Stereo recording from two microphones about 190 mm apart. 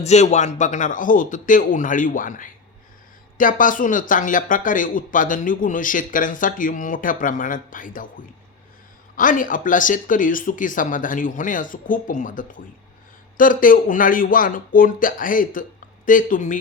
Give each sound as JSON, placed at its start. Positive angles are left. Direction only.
{"t": 0.0, "sound": "speech", "side_deg": 35}